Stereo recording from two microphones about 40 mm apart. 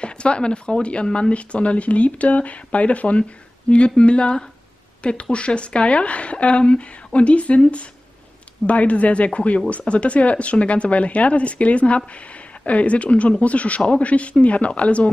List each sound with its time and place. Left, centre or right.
0.0 s speech: left